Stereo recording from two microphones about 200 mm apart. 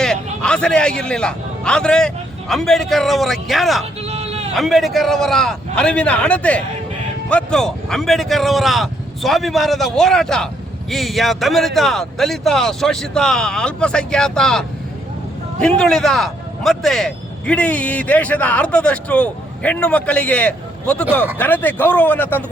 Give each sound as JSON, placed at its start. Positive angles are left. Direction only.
{"t": 0.0, "sound": "a man's voice", "side_deg": 5}
{"t": 4.0, "sound": "bleat", "side_deg": -30}
{"t": 4.5, "sound": "speech", "side_deg": 0}
{"t": 15.6, "sound": "speech", "side_deg": 5}